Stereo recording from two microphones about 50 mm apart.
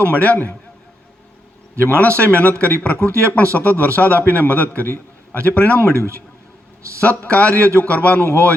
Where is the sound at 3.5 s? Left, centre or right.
Left.